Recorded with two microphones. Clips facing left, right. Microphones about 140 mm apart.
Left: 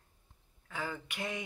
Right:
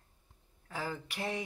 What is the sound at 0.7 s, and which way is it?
Speech, 35° right (ahead or behind).